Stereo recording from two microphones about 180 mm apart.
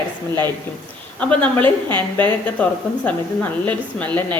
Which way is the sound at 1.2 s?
5° left (ahead or behind).